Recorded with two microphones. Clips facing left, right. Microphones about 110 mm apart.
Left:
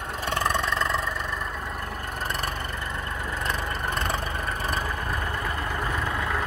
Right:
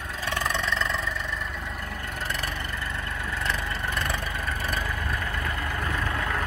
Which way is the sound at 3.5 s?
40° left (ahead or behind).